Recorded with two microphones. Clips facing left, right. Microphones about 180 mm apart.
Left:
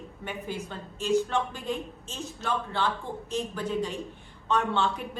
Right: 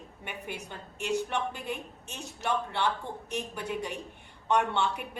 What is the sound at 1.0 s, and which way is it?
Speech, 65° right (ahead or behind).